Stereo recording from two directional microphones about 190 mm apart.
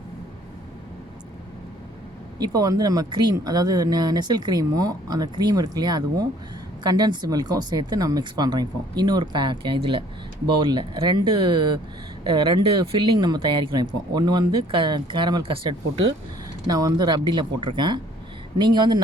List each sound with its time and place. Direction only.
2.4 s speech: 20° right (ahead or behind)
16.6 s speech: 20° right (ahead or behind)